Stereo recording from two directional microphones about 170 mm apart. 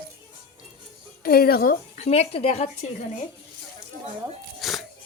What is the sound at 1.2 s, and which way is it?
Speech, 65° left (ahead or behind).